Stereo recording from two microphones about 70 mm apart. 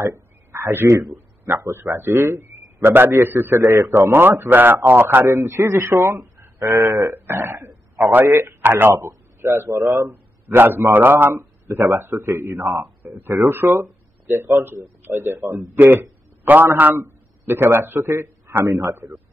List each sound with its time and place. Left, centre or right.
0.0 s a sound: right
1.1 s a man's voice: right
5.2 s speech: right
6.7 s speech: right
7.1 s a man's voice: right
10.0 s a sound: right
10.9 s a man's voice: right
12.5 s a man's voice: right
12.8 s speech: right
13.6 s speech: right
14.6 s a man's voice: right